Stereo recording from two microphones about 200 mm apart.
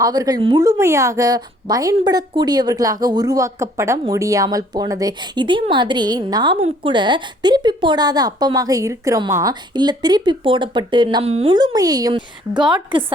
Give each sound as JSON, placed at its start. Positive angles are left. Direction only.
{"t": 0.0, "sound": "a woman's voice", "side_deg": -20}